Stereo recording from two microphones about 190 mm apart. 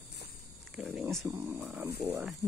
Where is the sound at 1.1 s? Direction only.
15° right (ahead or behind).